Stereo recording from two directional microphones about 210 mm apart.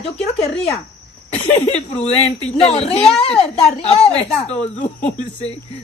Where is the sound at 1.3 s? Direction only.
30° left (ahead or behind).